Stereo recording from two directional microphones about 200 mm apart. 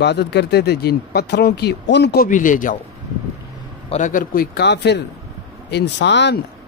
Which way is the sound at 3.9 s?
40° left (ahead or behind).